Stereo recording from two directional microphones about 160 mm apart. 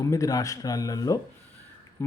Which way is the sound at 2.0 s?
15° left (ahead or behind).